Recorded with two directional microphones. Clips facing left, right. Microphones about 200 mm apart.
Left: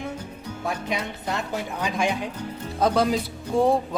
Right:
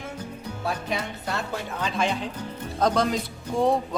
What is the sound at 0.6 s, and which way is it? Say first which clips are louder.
A woman's voice: left 1 dB; 20° left (ahead or behind).